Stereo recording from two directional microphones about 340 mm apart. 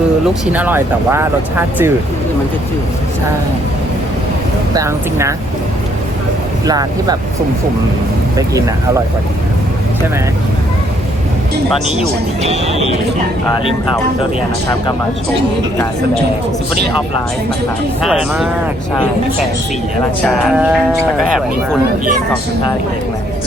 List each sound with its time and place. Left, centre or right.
0.5 s speech: centre
4.7 s speech: centre
6.7 s speech: centre
12.4 s speech: centre
18.0 s speech: centre
20.2 s speech: centre